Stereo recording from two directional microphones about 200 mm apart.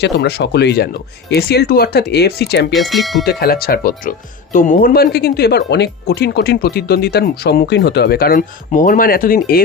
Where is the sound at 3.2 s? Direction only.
50° left (ahead or behind).